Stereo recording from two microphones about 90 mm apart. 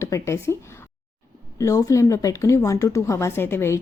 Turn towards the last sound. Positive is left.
turn(degrees=25)  # may be behind; listen again after turning